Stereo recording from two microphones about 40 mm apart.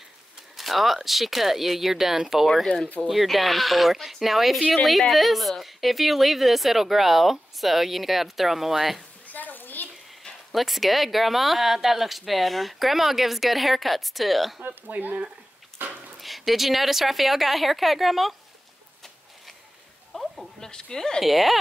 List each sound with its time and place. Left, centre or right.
0.6 s a woman's voice: centre
9.3 s a sound: left
10.5 s a woman's voice: centre
14.7 s speech: right
15.8 s a sound: right
16.2 s a woman's voice: centre
20.1 s a sound: centre
20.6 s a woman's voice: centre
21.2 s a woman's voice: centre